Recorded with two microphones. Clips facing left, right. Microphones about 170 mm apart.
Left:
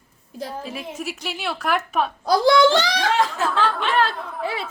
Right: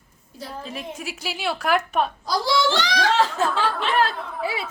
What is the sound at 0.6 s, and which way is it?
Speech, centre (ahead or behind).